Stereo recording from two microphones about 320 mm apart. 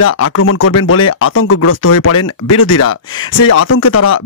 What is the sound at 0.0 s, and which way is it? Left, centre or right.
Speech, left.